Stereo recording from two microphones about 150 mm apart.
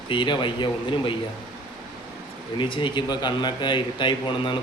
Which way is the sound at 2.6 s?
35° left (ahead or behind).